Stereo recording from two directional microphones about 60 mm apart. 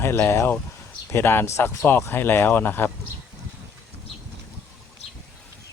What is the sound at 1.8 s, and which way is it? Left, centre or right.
Speech, left.